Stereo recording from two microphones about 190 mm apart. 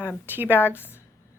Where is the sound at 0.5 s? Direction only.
10° left (ahead or behind).